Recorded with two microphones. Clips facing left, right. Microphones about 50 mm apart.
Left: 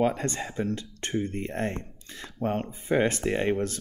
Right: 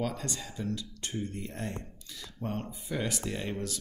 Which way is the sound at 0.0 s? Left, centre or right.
Left.